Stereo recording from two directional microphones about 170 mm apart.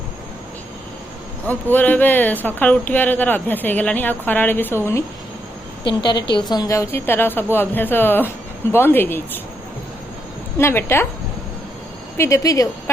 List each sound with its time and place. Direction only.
1.5 s speech: 10° left (ahead or behind)
5.9 s speech: 25° left (ahead or behind)
10.6 s speech: 15° left (ahead or behind)
12.1 s speech: 15° left (ahead or behind)